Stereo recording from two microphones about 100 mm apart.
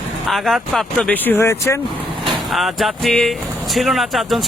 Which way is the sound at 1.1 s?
20° left (ahead or behind).